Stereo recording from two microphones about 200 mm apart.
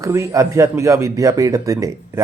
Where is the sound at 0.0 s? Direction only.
15° right (ahead or behind).